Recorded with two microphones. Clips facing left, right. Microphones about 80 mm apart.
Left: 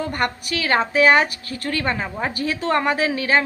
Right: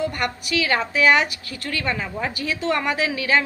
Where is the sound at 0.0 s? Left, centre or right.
Left.